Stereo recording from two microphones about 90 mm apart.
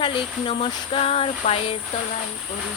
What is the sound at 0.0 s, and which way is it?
Speech, 85° left.